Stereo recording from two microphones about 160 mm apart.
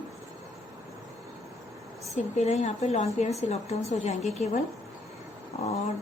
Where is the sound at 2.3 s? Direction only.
45° left (ahead or behind).